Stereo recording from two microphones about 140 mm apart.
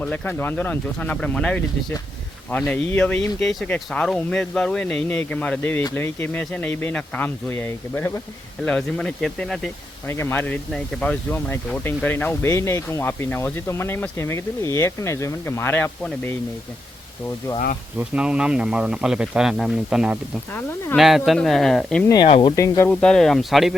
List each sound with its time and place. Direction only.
0.0 s speech: 10° left (ahead or behind)
10.1 s speech: 20° left (ahead or behind)
17.9 s speech: 10° right (ahead or behind)
20.5 s speech: 15° left (ahead or behind)
20.9 s speech: centre (ahead or behind)
22.3 s speech: 40° left (ahead or behind)
22.5 s speech: 20° left (ahead or behind)
22.9 s speech: 5° left (ahead or behind)